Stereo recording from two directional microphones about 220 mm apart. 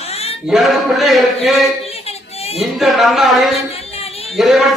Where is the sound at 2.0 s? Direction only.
25° left (ahead or behind).